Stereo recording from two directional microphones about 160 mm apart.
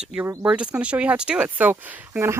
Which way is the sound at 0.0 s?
5° right (ahead or behind).